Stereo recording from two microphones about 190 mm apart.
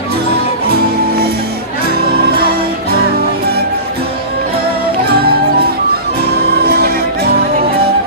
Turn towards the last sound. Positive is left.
turn(degrees=-55)  # may be behind; listen again after turning